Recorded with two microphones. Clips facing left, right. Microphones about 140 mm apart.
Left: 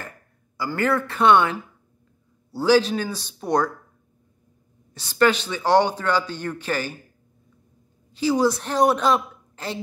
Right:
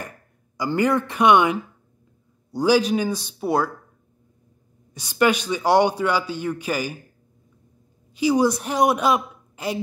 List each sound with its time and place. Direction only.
0.6 s a man's voice: 15° right (ahead or behind)
4.9 s a man's voice: 10° right (ahead or behind)
8.1 s a woman's voice: 15° right (ahead or behind)